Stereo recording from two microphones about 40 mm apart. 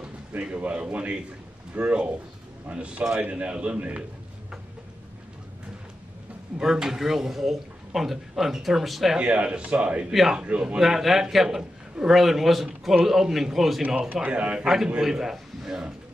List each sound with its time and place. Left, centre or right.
0.3 s a man's voice: right
6.6 s speech: centre
9.2 s a man's voice: right
10.8 s speech: centre
12.1 s a man's voice: centre
13.8 s a man's voice: right
14.6 s a man's voice: centre